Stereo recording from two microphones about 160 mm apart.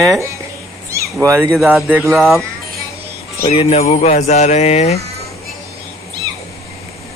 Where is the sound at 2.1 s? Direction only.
Centre (ahead or behind).